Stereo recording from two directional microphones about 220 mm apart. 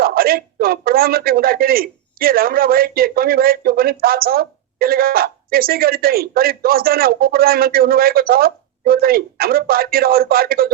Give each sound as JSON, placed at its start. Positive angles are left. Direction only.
{"t": 0.0, "sound": "speech", "side_deg": -45}